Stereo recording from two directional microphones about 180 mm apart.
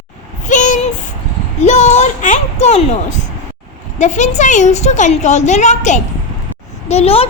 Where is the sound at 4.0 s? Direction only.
40° left (ahead or behind).